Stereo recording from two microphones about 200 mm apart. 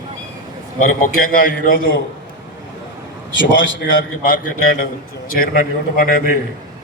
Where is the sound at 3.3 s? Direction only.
65° left (ahead or behind).